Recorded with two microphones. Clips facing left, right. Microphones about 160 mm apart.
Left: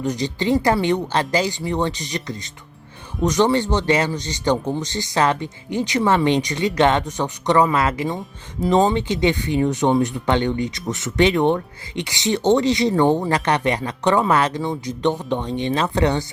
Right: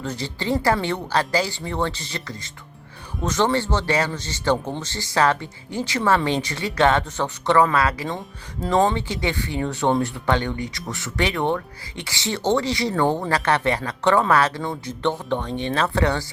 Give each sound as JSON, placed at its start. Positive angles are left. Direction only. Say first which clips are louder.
{"t": 0.0, "sound": "speech", "louder": "left 6 dB", "side_deg": 15}